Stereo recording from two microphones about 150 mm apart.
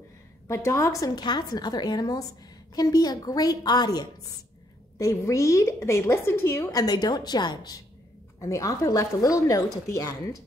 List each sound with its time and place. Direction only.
0.5 s a woman's voice: 20° left (ahead or behind)